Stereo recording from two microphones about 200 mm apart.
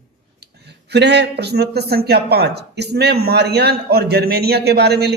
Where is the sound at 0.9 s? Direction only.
60° right (ahead or behind).